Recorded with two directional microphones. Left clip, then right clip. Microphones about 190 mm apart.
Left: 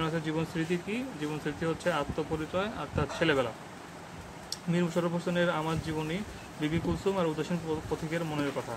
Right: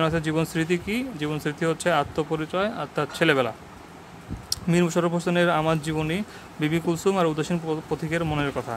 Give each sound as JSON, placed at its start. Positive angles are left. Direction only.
{"t": 0.0, "sound": "speech", "side_deg": -45}